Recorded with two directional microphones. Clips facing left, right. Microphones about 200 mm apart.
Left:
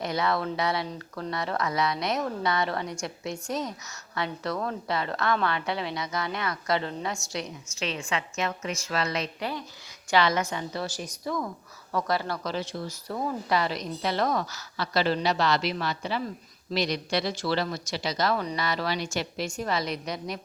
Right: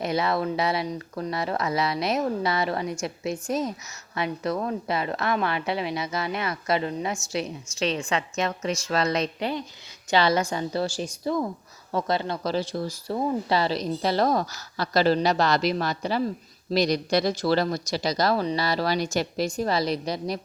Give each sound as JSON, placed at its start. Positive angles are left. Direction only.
{"t": 0.0, "sound": "a woman's voice", "side_deg": -25}
{"t": 7.3, "sound": "speech", "side_deg": -35}
{"t": 9.4, "sound": "a woman's voice", "side_deg": -25}
{"t": 12.4, "sound": "speech", "side_deg": -35}